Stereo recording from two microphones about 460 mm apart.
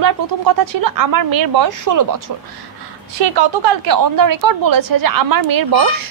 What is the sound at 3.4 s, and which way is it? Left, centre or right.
A woman's voice, right.